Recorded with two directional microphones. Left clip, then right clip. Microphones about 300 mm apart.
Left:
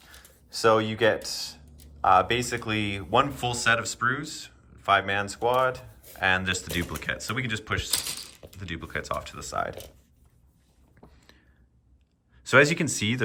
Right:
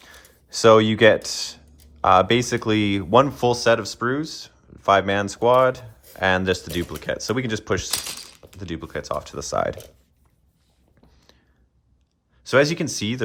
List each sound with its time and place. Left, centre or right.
0.0 s speech: right
11.2 s whispering: centre
12.4 s speech: centre